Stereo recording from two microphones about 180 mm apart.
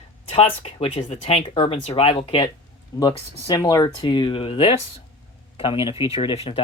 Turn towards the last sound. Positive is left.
turn(degrees=30)  # may be behind; listen again after turning